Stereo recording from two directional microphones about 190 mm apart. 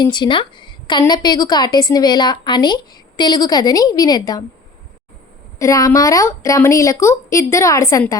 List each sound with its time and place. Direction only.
0.0 s a woman's voice: 25° left (ahead or behind)
5.5 s a woman's voice: 15° left (ahead or behind)